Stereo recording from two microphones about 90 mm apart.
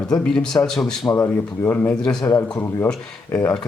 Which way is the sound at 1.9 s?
5° left (ahead or behind).